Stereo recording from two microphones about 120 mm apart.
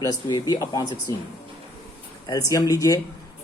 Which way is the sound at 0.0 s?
35° left (ahead or behind).